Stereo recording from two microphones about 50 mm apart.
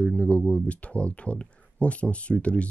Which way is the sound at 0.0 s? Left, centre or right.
Left.